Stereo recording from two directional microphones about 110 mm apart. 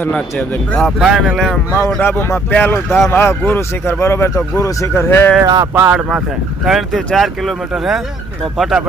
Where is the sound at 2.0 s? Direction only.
20° left (ahead or behind).